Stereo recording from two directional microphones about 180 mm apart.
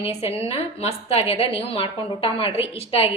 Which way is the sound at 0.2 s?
35° left (ahead or behind).